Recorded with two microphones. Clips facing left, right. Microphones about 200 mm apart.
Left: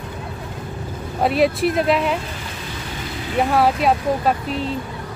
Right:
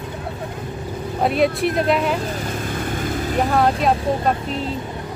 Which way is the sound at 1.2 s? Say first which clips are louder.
Left 1 dB; centre (ahead or behind).